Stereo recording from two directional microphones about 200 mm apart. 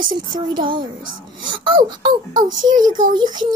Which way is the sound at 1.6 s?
20° right (ahead or behind).